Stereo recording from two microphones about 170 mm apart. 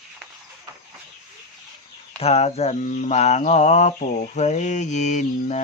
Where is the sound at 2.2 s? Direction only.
35° left (ahead or behind).